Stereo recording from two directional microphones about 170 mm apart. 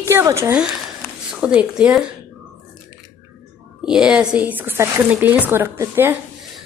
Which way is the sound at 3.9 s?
5° right (ahead or behind).